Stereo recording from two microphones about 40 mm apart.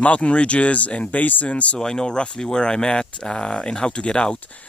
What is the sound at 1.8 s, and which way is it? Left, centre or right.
Speech, centre.